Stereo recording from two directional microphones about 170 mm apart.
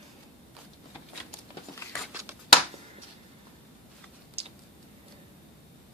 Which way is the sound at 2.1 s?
15° right (ahead or behind).